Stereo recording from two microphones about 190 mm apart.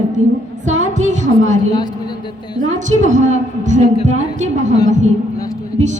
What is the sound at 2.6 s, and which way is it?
A woman's voice, 40° right (ahead or behind).